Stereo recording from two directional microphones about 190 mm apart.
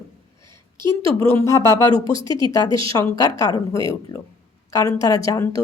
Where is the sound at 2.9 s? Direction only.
15° left (ahead or behind).